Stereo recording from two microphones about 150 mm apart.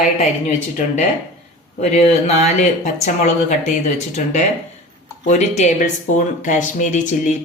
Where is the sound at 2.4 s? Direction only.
50° left (ahead or behind).